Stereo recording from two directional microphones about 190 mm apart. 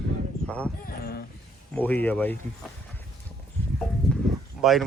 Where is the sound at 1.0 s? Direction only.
55° left (ahead or behind).